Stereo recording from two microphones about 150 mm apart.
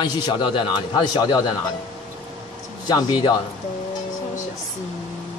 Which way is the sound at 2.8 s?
30° left (ahead or behind).